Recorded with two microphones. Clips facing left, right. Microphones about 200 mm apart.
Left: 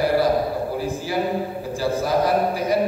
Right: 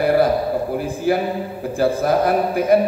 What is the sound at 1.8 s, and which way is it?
Speech, 55° right (ahead or behind).